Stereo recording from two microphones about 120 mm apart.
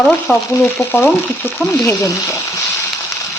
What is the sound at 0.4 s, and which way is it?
Frying, 20° left (ahead or behind).